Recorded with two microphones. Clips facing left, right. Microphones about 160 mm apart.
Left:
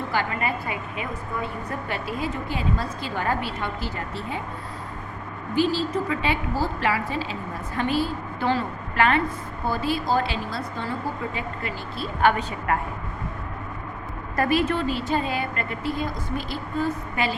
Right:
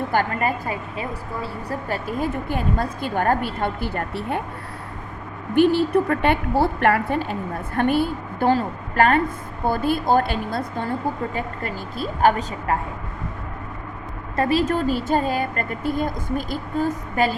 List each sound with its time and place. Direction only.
0.1 s a woman's voice: 45° right (ahead or behind)
1.9 s speech: 45° right (ahead or behind); by 4.4 s 65° right (ahead or behind)
5.5 s a woman's voice: 60° right (ahead or behind); by 12.8 s 35° right (ahead or behind)
14.3 s speech: 30° right (ahead or behind)